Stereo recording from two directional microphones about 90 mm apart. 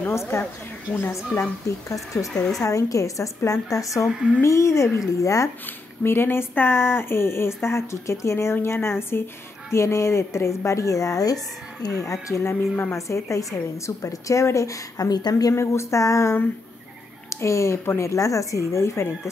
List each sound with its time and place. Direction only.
0.9 s speech: 25° left (ahead or behind)
2.3 s speech: 5° left (ahead or behind)
2.6 s a woman's voice: 40° left (ahead or behind)
4.1 s speech: 10° right (ahead or behind)
4.4 s a woman's voice: 35° left (ahead or behind)
5.7 s a woman's voice: 25° left (ahead or behind); by 15.5 s 45° left (ahead or behind)
15.5 s a woman's voice: 30° left (ahead or behind)